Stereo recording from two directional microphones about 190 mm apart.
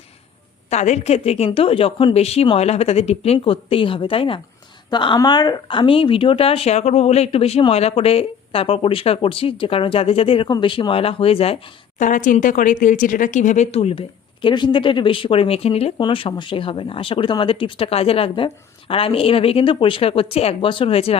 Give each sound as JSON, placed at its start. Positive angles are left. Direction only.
{"t": 0.7, "sound": "speech", "side_deg": 35}